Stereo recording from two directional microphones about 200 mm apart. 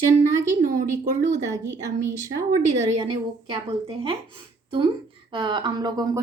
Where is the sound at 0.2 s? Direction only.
40° right (ahead or behind).